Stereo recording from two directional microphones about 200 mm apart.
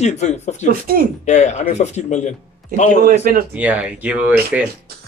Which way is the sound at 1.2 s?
35° left (ahead or behind).